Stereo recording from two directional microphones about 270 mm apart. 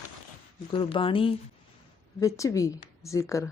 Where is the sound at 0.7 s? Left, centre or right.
Centre.